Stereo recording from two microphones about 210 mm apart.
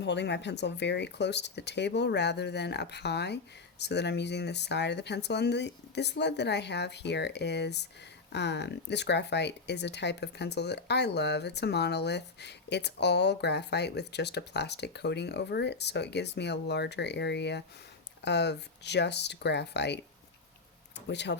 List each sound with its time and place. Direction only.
0.0 s speech: 55° left (ahead or behind)
21.1 s speech: 55° left (ahead or behind)